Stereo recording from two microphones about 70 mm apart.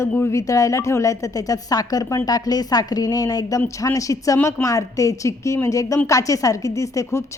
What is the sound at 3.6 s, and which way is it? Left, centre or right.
A woman's voice, left.